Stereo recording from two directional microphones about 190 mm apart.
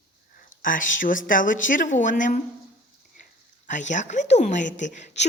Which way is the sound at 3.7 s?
40° left (ahead or behind).